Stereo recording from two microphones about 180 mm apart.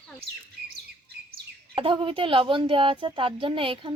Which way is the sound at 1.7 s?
30° right (ahead or behind).